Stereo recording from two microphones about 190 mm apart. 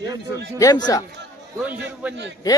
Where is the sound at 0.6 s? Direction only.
20° left (ahead or behind).